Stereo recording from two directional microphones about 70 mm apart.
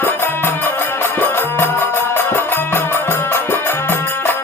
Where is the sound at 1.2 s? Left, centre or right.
Left.